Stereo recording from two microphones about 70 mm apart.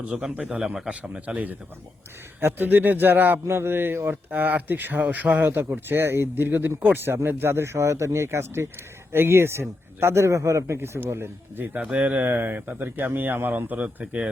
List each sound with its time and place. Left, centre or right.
0.0 s a man's voice: centre; by 10.8 s right
10.8 s speech: right
11.8 s speech: centre